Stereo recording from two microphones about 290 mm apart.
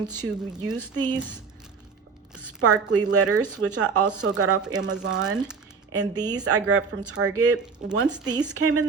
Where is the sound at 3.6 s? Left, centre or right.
Right.